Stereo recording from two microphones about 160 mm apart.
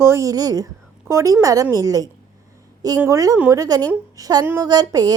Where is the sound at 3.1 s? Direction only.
20° right (ahead or behind).